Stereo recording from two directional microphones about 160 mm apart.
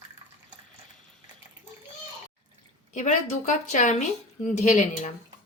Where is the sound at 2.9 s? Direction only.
50° left (ahead or behind).